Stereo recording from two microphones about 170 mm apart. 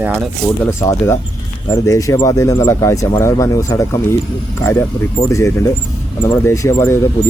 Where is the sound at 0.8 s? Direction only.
15° left (ahead or behind).